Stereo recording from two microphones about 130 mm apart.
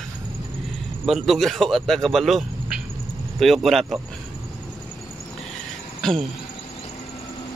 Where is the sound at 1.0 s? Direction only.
Centre (ahead or behind).